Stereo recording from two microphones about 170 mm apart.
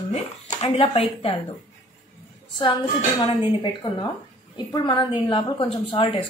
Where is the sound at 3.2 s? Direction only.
25° left (ahead or behind).